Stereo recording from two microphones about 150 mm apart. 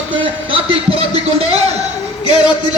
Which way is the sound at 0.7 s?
40° right (ahead or behind).